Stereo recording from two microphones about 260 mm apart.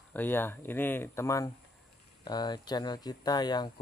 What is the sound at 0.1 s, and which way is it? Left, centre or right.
Speech, centre.